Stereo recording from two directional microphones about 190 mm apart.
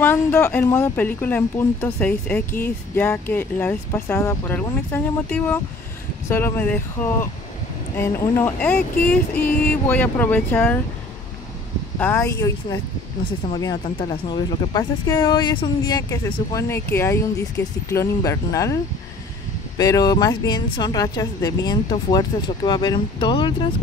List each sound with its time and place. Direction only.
0.0 s speech: 10° left (ahead or behind)
12.0 s speech: 15° left (ahead or behind)
13.8 s speech: 25° left (ahead or behind)
19.8 s speech: 20° left (ahead or behind)